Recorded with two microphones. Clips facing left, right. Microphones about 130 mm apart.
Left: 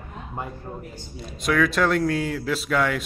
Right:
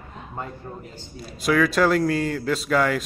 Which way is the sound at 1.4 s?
Centre (ahead or behind).